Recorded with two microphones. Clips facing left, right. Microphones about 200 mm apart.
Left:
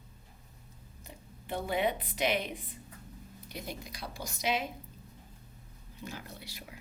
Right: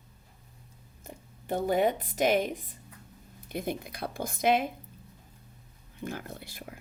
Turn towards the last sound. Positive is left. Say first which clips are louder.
# right 5 dB
turn(degrees=-50)  # may be behind; listen again after turning